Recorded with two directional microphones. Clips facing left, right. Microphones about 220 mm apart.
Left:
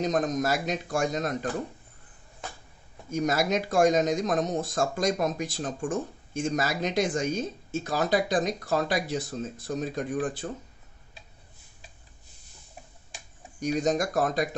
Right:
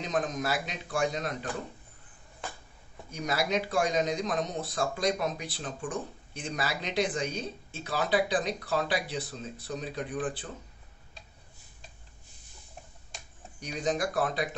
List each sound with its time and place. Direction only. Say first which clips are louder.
0.0 s speech: left 5 dB; 40° left (ahead or behind)
3.1 s speech: left 5 dB; 45° left (ahead or behind)
13.6 s speech: left 5 dB; 45° left (ahead or behind)